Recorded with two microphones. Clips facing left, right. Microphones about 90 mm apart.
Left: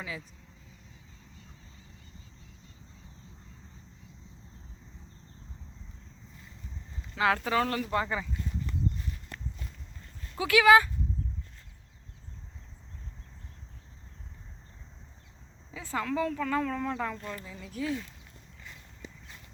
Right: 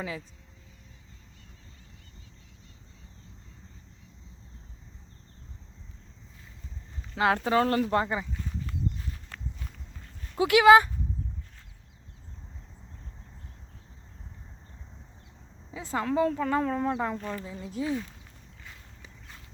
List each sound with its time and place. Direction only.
7.2 s speech: 30° right (ahead or behind)
8.0 s speech: 20° right (ahead or behind)
10.3 s speech: 25° right (ahead or behind)
15.7 s speech: 25° right (ahead or behind)